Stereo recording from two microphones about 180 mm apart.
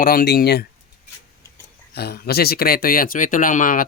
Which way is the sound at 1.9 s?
60° left (ahead or behind).